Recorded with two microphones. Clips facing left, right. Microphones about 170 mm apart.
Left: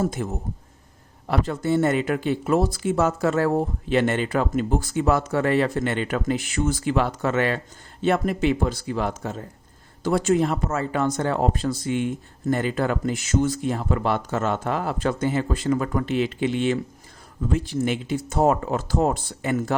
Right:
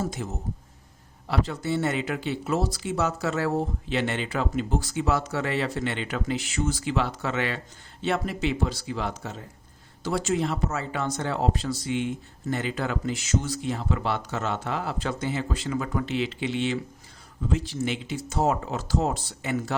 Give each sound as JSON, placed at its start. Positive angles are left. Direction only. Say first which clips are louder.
{"t": 0.0, "sound": "speech", "louder": "left 5 dB", "side_deg": 50}
{"t": 1.3, "sound": "speech", "louder": "left 4 dB", "side_deg": 50}